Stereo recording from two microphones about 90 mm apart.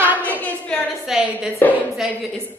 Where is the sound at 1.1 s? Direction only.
5° right (ahead or behind).